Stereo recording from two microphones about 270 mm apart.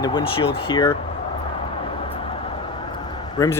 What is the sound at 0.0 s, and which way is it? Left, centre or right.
Speech, centre.